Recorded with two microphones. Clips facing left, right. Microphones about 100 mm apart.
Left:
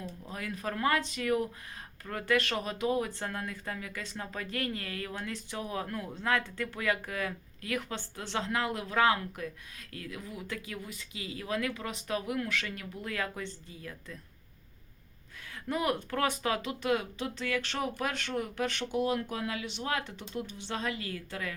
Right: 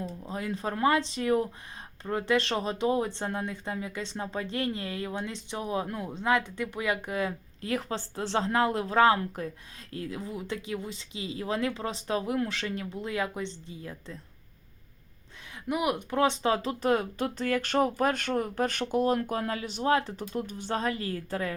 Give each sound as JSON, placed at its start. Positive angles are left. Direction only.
{"t": 0.2, "sound": "speech", "side_deg": -25}
{"t": 15.6, "sound": "speech", "side_deg": -15}